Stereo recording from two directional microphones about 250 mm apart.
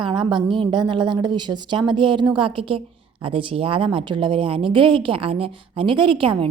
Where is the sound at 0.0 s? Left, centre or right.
Centre.